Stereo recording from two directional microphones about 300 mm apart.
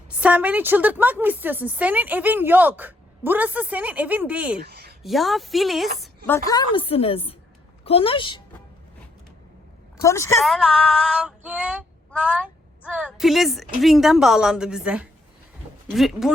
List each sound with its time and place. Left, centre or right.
0.1 s speech: centre
4.6 s a sound: right
5.0 s a woman's voice: centre
10.0 s speech: centre